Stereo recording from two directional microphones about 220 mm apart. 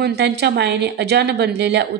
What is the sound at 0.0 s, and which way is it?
Speech, 50° right (ahead or behind).